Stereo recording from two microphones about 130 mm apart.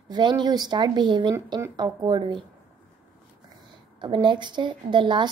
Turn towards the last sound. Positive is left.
turn(degrees=-35)  # may be behind; listen again after turning